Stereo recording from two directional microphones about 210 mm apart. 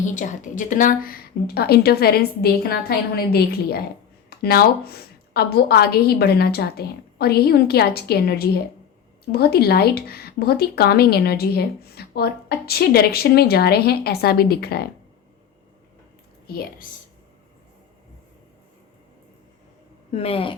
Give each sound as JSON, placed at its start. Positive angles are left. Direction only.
{"t": 0.0, "sound": "speech", "side_deg": 35}
{"t": 20.1, "sound": "speech", "side_deg": 30}